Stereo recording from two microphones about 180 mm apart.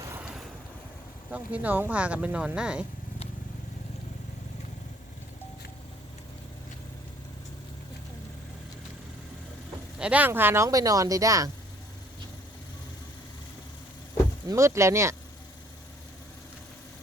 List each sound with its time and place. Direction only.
0.0 s vehicle: 10° right (ahead or behind)
1.3 s speech: 10° right (ahead or behind)
10.0 s speech: 10° right (ahead or behind)
14.4 s speech: 15° right (ahead or behind)